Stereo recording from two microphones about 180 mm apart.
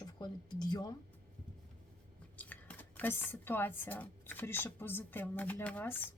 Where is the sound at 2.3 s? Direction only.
10° left (ahead or behind).